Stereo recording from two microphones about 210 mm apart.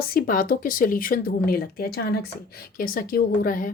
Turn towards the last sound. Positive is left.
turn(degrees=40)  # may be behind; listen again after turning